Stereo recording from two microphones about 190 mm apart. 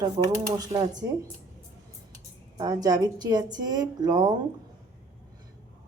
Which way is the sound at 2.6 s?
20° right (ahead or behind).